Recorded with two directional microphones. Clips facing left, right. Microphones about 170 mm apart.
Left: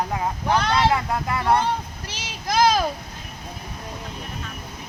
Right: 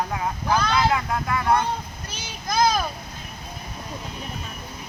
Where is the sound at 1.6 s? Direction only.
90° left.